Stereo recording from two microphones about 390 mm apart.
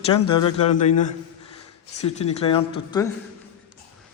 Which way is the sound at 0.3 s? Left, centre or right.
Centre.